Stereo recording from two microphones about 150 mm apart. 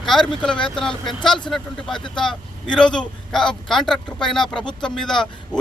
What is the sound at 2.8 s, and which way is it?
Speech, 5° left (ahead or behind).